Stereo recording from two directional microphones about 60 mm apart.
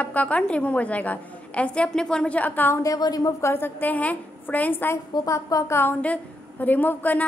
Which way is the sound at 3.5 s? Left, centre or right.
Left.